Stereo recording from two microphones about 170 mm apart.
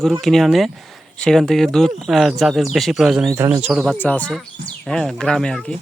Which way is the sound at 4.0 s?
10° left (ahead or behind).